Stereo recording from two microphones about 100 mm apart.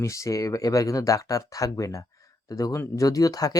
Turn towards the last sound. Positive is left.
turn(degrees=35)  # may be behind; listen again after turning